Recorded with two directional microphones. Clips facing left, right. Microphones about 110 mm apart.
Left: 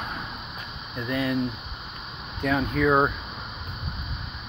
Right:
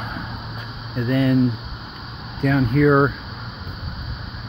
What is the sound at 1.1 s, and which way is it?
Speech, 10° left (ahead or behind).